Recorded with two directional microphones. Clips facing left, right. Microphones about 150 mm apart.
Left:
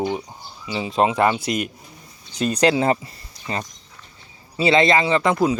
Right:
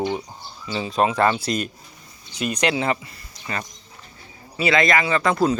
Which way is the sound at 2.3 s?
35° left (ahead or behind).